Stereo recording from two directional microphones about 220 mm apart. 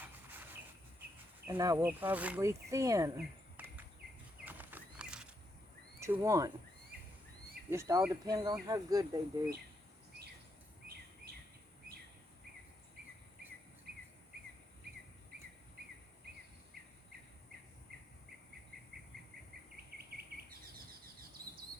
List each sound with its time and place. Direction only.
0.0 s a sound: 10° right (ahead or behind)
1.5 s speech: 15° right (ahead or behind)
3.2 s a sound: 10° right (ahead or behind)
4.4 s horse: 10° right (ahead or behind)
6.0 s speech: 15° right (ahead or behind)
7.7 s speech: 15° right (ahead or behind)
20.5 s bird vocalization: 40° right (ahead or behind)